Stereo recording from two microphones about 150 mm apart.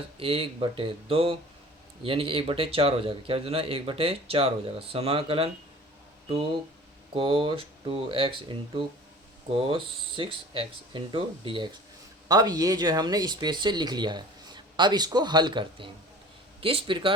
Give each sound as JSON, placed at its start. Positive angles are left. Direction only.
{"t": 0.2, "sound": "speech", "side_deg": -40}
{"t": 7.1, "sound": "speech", "side_deg": -35}
{"t": 9.5, "sound": "speech", "side_deg": -35}